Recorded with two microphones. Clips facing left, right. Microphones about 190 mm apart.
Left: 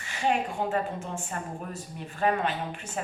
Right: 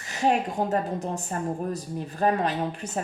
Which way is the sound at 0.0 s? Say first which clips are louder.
Right 3 dB; 40° right (ahead or behind).